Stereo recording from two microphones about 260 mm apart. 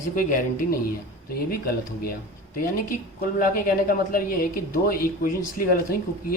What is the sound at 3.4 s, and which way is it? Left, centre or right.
Speech, left.